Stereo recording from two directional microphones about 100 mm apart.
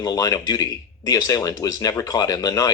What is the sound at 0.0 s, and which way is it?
Speech, 40° left (ahead or behind).